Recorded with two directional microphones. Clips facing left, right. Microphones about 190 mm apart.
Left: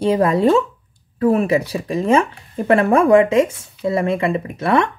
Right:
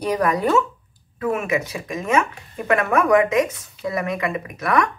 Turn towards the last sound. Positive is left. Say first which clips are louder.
# left 4 dB
turn(degrees=30)  # may be behind; listen again after turning